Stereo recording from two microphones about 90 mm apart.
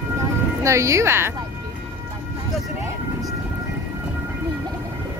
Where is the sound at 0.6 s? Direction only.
35° right (ahead or behind).